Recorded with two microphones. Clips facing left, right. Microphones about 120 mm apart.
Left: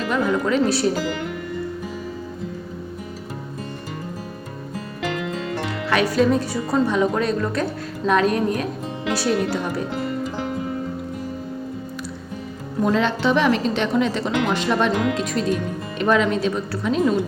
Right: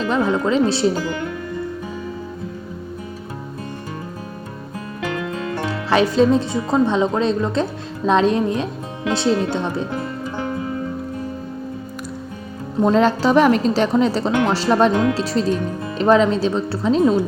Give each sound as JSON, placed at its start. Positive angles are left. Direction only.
{"t": 0.1, "sound": "speech", "side_deg": -25}
{"t": 5.6, "sound": "speech", "side_deg": -30}
{"t": 12.8, "sound": "a woman's voice", "side_deg": -40}